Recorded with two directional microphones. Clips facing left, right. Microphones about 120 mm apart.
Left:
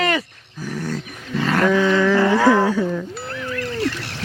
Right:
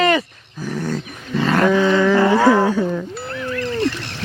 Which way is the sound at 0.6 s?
25° right (ahead or behind).